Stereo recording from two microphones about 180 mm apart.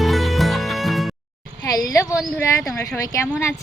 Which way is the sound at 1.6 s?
20° left (ahead or behind).